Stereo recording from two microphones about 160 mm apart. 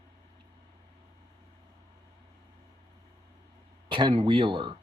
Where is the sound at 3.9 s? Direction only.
30° right (ahead or behind).